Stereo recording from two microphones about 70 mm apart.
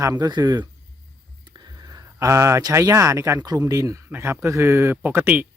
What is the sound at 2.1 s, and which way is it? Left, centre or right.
Speech, right.